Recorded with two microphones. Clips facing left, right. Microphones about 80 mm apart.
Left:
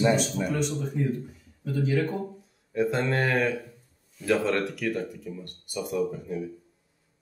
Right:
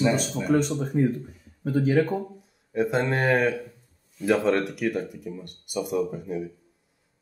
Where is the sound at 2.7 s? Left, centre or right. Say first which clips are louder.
Right 2 dB; centre.